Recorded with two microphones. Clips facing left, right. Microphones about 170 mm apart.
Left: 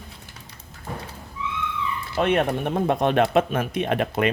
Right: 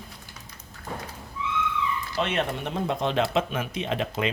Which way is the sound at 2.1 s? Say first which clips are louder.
Left 7 dB; 55° left (ahead or behind).